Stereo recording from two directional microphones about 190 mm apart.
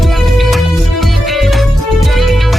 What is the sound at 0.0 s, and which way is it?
Music, centre (ahead or behind).